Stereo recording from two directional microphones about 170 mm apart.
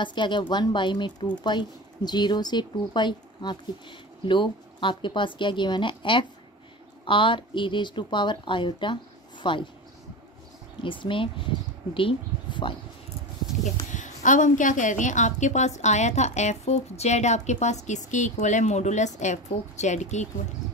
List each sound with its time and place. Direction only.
0.0 s speech: 25° left (ahead or behind)
10.8 s speech: 30° left (ahead or behind)
13.9 s a woman's voice: 50° left (ahead or behind)